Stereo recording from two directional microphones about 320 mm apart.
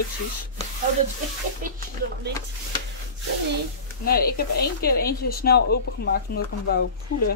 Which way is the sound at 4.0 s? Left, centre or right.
Left.